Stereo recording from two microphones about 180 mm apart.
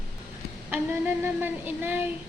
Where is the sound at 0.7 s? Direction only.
10° right (ahead or behind).